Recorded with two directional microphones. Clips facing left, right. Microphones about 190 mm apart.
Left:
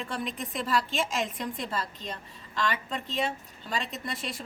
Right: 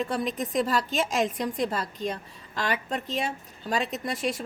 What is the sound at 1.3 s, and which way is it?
A woman's voice, 45° right (ahead or behind).